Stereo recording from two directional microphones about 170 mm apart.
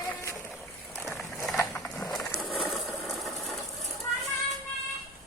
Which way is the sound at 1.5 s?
10° left (ahead or behind).